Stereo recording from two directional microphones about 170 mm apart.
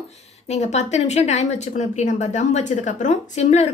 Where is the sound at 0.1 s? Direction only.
40° left (ahead or behind).